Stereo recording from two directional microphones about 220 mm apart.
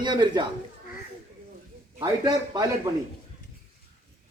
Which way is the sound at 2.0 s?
20° right (ahead or behind).